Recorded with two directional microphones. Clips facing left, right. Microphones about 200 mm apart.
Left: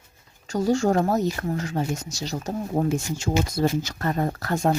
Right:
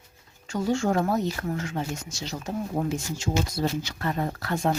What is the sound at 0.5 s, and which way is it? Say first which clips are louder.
Speech: left 4 dB; 40° left (ahead or behind).